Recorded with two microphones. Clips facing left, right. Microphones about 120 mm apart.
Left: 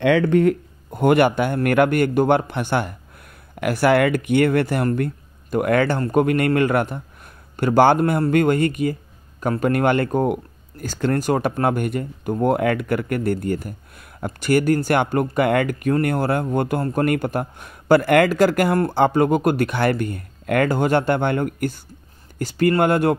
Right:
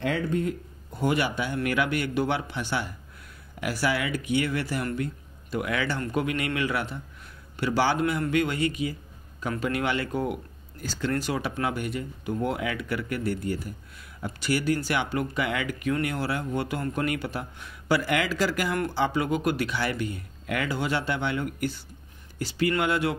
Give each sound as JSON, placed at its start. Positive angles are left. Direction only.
{"t": 0.0, "sound": "a man's voice", "side_deg": 85}